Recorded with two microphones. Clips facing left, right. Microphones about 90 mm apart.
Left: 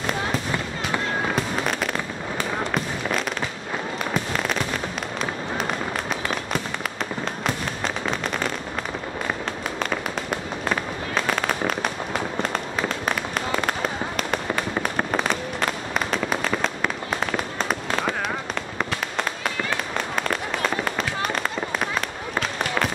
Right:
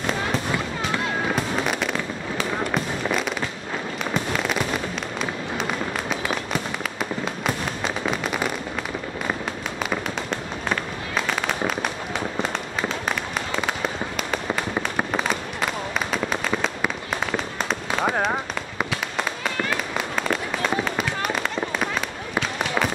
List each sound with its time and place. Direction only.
1.3 s fireworks: centre (ahead or behind)
10.3 s fireworks: 5° left (ahead or behind)
15.0 s fireworks: 5° right (ahead or behind)
20.8 s fireworks: 5° right (ahead or behind)